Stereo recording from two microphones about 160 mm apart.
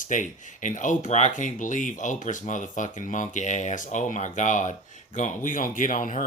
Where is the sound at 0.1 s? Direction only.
50° left (ahead or behind).